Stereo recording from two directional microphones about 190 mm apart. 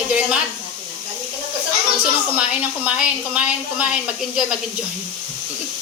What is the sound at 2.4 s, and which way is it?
Speech, 5° right (ahead or behind).